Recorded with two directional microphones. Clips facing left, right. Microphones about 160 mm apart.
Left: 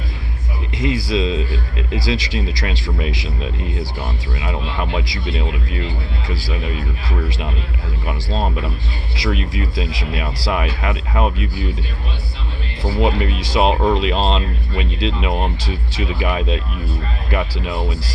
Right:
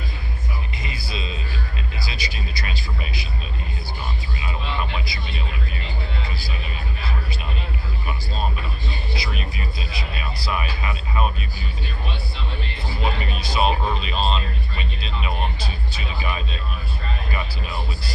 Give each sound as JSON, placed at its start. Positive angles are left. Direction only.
{"t": 0.8, "sound": "speech", "side_deg": 90}
{"t": 8.0, "sound": "speech", "side_deg": 90}
{"t": 13.0, "sound": "speech", "side_deg": 90}